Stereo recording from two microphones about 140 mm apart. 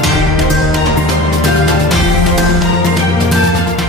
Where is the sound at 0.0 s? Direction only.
Centre (ahead or behind).